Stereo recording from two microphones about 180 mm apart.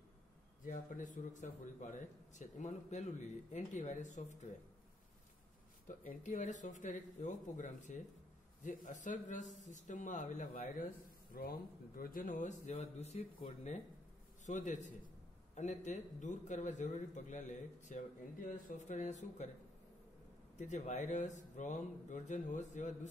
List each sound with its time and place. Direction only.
0.7 s a man's voice: 45° left (ahead or behind)
5.9 s a man's voice: 45° left (ahead or behind)
20.5 s a man's voice: 40° left (ahead or behind)